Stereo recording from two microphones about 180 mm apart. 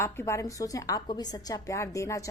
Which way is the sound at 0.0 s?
15° left (ahead or behind).